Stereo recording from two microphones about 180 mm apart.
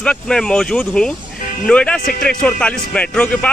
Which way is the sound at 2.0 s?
55° left (ahead or behind).